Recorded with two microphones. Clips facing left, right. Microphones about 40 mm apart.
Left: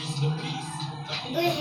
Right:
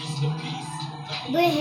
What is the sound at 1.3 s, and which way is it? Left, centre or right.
Music, right.